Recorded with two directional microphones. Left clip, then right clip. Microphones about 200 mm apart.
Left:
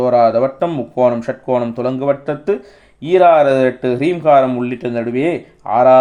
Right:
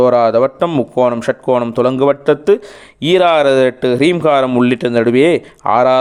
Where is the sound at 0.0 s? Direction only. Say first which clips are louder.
Right 2 dB; 35° right (ahead or behind).